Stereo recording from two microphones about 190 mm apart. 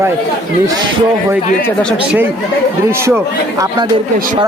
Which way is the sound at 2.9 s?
15° right (ahead or behind).